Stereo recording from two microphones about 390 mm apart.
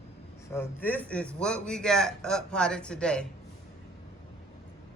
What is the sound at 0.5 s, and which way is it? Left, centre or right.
A man's voice, centre.